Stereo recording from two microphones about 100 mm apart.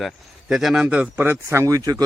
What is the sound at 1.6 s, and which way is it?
Speech, 35° right (ahead or behind).